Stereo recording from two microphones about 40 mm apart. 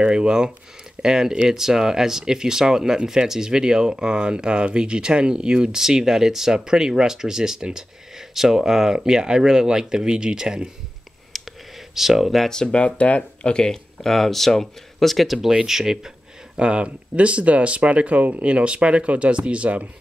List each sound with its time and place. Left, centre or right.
0.0 s speech: right
11.3 s whispering: centre
11.9 s speech: centre
12.7 s speech: left
13.7 s speech: centre
16.5 s speech: right